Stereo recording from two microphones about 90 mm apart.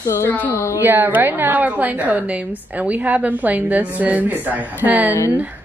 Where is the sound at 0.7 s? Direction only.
20° right (ahead or behind).